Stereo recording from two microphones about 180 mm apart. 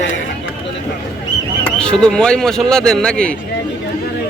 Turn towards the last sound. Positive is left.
turn(degrees=5)  # may be behind; listen again after turning